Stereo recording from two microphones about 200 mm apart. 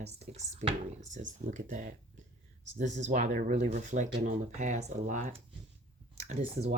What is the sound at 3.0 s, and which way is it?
Speech, 35° right (ahead or behind).